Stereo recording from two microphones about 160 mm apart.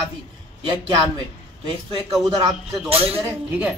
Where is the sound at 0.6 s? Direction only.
30° right (ahead or behind).